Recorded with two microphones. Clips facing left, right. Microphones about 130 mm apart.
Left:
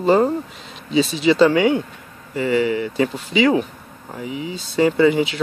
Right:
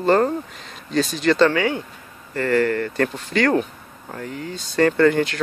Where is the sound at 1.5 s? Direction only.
20° left (ahead or behind).